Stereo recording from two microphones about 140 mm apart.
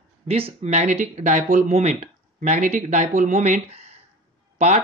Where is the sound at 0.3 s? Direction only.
45° right (ahead or behind).